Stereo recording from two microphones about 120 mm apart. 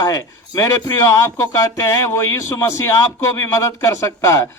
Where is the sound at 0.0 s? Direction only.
30° left (ahead or behind).